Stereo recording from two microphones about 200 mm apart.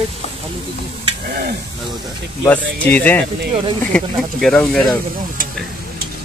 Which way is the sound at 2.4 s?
10° left (ahead or behind).